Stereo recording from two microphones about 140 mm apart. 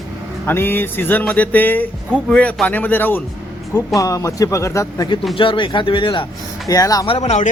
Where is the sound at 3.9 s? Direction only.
25° left (ahead or behind).